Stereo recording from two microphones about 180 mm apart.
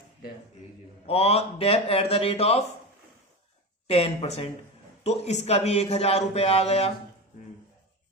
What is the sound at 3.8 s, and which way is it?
A man's voice, 35° left (ahead or behind).